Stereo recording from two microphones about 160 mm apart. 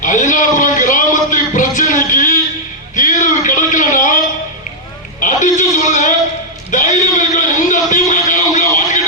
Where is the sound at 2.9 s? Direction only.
50° left (ahead or behind).